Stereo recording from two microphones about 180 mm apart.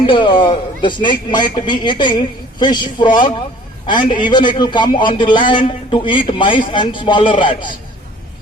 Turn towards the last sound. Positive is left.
turn(degrees=30)  # may be behind; listen again after turning